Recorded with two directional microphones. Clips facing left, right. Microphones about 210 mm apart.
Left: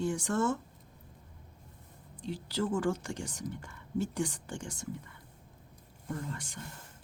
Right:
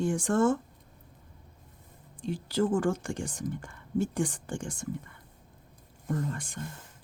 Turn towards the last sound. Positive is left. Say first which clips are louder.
# right 6 dB
turn(degrees=-50)  # may be behind; listen again after turning